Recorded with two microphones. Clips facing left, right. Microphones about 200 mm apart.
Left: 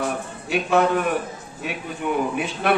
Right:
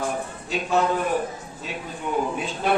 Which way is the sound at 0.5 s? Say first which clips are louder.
Left 3 dB; 65° left (ahead or behind).